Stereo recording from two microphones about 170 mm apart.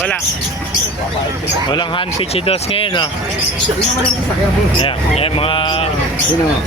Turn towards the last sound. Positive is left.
turn(degrees=30)  # may be behind; listen again after turning